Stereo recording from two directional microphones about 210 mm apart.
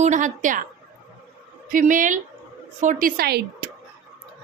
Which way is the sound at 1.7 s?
40° right (ahead or behind).